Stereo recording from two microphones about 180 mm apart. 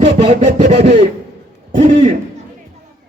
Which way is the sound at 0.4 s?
40° right (ahead or behind).